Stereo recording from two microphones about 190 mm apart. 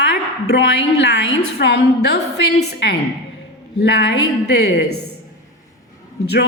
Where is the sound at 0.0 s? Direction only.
65° left (ahead or behind).